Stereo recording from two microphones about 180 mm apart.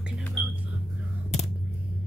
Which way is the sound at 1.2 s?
35° left (ahead or behind).